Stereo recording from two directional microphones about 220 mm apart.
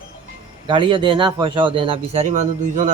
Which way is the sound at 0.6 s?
20° right (ahead or behind).